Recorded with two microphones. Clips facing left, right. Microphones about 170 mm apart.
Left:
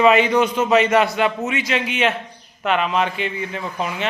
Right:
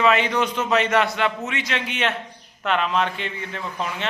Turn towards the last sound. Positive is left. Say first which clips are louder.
# left 3 dB
turn(degrees=10)  # may be behind; listen again after turning